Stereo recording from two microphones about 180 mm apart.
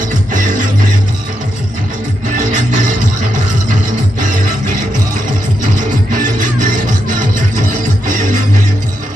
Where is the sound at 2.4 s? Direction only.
45° right (ahead or behind).